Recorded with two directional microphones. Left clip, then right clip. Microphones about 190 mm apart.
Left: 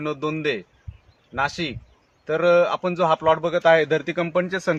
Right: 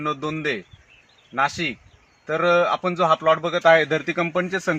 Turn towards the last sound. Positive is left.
turn(degrees=35)  # may be behind; listen again after turning